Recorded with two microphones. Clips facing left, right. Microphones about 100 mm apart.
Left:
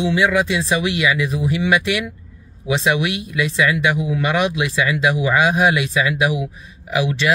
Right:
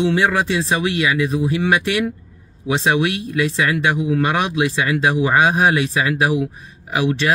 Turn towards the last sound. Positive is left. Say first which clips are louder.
# even
turn(degrees=-40)  # may be behind; listen again after turning